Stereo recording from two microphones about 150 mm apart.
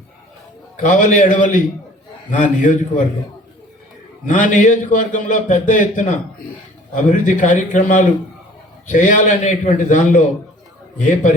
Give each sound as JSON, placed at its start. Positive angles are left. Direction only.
{"t": 0.8, "sound": "a man's voice", "side_deg": 60}
{"t": 4.3, "sound": "a man's voice", "side_deg": 60}